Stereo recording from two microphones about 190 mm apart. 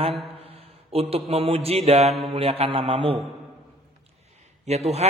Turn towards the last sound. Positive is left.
turn(degrees=-35)  # may be behind; listen again after turning